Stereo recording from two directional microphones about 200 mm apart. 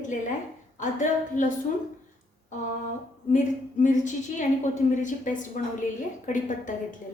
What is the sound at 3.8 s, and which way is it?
A woman's voice, 40° left (ahead or behind).